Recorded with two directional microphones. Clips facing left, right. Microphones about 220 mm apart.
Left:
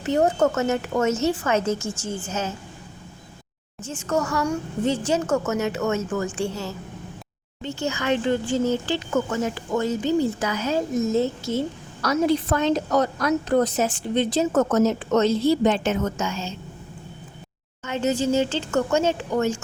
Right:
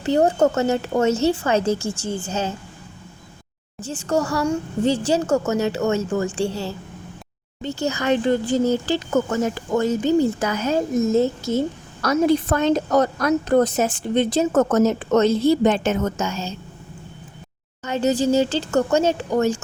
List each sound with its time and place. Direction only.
0.0 s speech: 30° right (ahead or behind)
3.8 s a woman's voice: 35° right (ahead or behind)
17.8 s speech: 35° right (ahead or behind)